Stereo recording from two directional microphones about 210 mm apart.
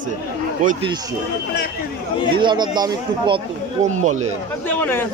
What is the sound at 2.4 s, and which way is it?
Speech, 20° right (ahead or behind).